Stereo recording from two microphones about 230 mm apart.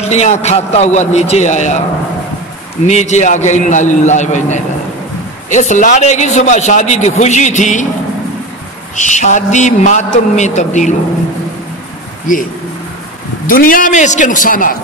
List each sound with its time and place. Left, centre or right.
0.0 s a man's voice: left
2.9 s a man's voice: left
8.9 s a man's voice: left
12.3 s a man's voice: left
13.5 s a man's voice: left